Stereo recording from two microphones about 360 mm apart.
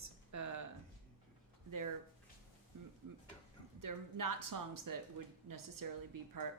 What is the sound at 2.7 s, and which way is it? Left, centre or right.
Speech, right.